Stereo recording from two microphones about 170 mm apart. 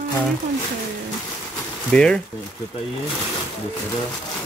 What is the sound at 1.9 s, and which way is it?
Speech, 5° left (ahead or behind).